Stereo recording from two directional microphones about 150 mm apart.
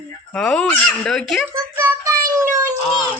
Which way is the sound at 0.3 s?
5° left (ahead or behind).